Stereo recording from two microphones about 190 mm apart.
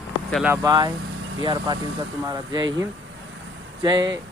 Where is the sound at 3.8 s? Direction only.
20° right (ahead or behind).